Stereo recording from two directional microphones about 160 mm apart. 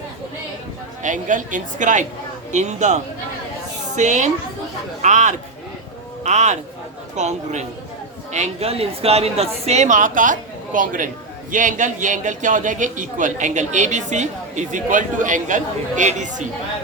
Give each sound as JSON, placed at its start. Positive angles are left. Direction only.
{"t": 1.0, "sound": "a man's voice", "side_deg": -50}